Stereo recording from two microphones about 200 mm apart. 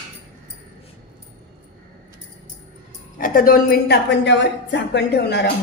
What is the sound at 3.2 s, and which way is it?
A woman's voice, 45° left (ahead or behind).